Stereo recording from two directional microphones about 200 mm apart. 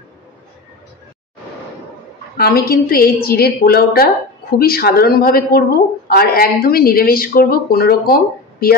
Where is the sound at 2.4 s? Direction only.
50° left (ahead or behind).